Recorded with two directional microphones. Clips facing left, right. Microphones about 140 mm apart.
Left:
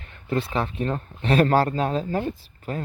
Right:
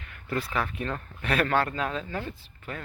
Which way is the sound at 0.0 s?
30° left (ahead or behind).